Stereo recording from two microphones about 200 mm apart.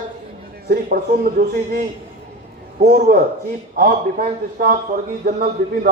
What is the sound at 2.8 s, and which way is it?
A man's voice, 45° right (ahead or behind).